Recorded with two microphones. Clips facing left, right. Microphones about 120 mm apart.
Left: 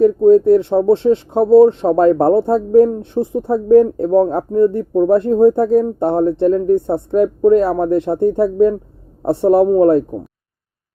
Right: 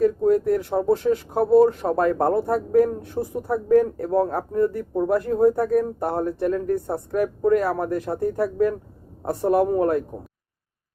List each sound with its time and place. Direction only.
0.0 s speech: 25° left (ahead or behind)